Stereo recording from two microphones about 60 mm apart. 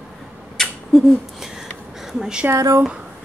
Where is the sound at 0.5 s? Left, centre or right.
Centre.